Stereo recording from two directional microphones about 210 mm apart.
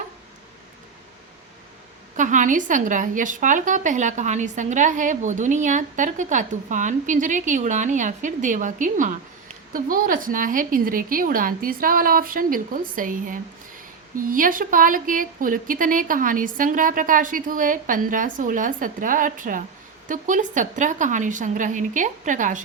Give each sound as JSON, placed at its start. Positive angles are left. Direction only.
{"t": 2.1, "sound": "a woman's voice", "side_deg": -35}